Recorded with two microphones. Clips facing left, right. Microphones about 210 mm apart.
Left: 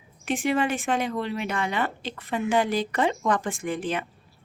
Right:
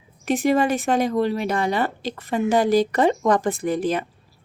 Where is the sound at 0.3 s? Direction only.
40° right (ahead or behind).